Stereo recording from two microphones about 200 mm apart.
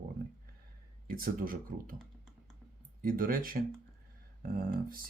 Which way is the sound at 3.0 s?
45° right (ahead or behind).